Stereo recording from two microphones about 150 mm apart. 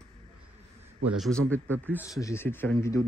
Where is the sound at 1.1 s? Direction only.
Centre (ahead or behind).